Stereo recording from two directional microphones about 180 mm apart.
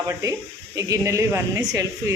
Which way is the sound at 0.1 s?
20° right (ahead or behind).